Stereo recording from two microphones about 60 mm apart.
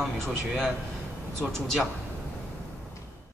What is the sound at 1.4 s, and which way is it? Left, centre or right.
Speech, right.